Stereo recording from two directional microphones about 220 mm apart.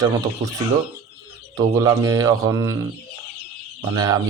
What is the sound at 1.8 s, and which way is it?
Speech, 15° right (ahead or behind).